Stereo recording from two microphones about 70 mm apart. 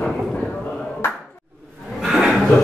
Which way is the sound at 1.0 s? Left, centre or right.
Left.